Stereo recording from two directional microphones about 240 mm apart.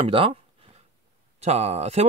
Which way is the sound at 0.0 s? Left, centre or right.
Right.